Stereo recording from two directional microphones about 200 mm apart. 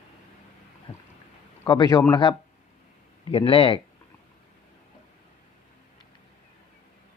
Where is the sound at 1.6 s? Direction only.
15° left (ahead or behind).